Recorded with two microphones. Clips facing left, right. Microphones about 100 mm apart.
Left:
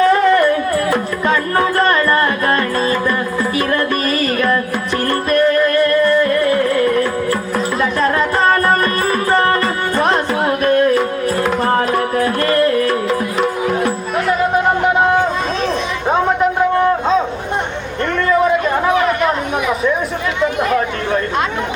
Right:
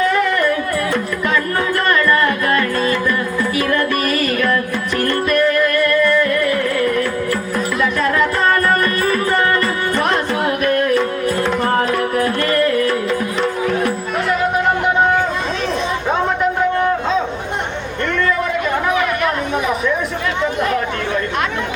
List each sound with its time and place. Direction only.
0.1 s music: 35° left (ahead or behind)
18.9 s chatter: 35° left (ahead or behind)